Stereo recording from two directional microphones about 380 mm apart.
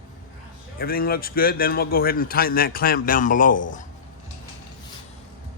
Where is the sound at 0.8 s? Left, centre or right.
Left.